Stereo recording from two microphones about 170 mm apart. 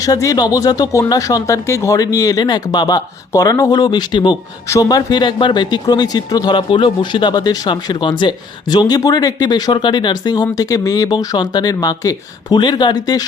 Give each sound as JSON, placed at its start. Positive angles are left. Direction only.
{"t": 0.0, "sound": "speech", "side_deg": 20}